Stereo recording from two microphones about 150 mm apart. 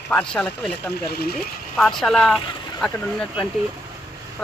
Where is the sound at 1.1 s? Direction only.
90° left.